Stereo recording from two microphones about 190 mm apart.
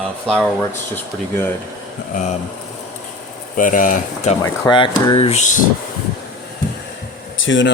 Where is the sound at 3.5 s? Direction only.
45° left (ahead or behind).